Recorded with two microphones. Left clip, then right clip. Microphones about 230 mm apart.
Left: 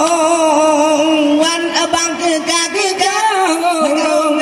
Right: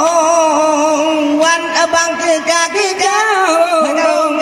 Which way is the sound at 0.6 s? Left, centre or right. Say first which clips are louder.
Even; left.